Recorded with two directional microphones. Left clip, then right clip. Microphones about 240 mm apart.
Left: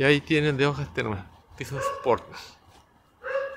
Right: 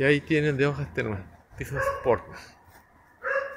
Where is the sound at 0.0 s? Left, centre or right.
Centre.